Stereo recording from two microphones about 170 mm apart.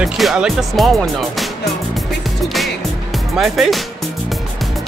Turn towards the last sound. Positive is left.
turn(degrees=0)  # may be behind; listen again after turning